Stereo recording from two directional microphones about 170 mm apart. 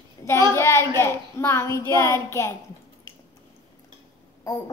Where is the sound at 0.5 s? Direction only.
15° left (ahead or behind).